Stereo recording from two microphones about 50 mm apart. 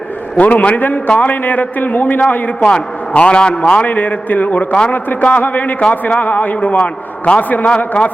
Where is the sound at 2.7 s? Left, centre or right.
Left.